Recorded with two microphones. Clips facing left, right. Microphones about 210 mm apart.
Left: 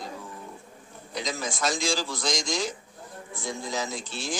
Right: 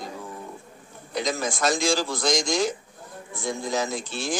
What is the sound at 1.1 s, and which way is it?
A man's voice, 55° right (ahead or behind).